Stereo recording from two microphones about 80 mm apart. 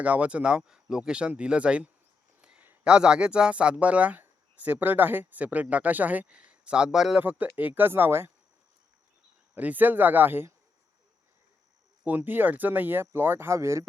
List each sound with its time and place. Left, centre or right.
0.0 s speech: centre
2.4 s a sound: centre
2.8 s speech: centre
7.2 s speech: right
9.6 s speech: right
12.0 s speech: right